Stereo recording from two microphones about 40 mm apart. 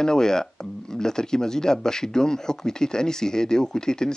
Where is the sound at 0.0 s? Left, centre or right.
Centre.